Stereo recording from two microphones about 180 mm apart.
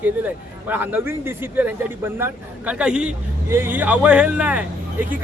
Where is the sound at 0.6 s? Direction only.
10° right (ahead or behind).